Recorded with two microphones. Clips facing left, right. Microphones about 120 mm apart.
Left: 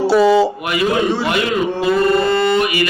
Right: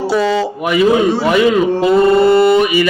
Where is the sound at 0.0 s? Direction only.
5° left (ahead or behind).